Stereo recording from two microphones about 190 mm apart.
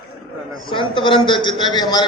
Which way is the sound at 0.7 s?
25° left (ahead or behind).